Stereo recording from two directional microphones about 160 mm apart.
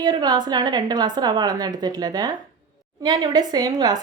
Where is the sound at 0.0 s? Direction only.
25° right (ahead or behind).